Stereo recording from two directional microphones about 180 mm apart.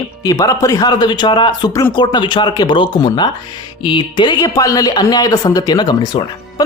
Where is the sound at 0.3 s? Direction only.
20° left (ahead or behind).